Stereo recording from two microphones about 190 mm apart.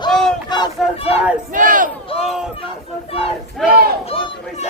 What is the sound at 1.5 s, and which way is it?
Battle cry, 45° right (ahead or behind).